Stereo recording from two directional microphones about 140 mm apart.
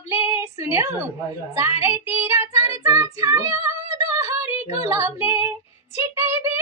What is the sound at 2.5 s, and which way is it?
Female singing, 20° right (ahead or behind).